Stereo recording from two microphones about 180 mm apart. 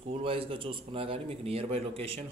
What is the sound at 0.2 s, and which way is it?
A man's voice, 30° right (ahead or behind).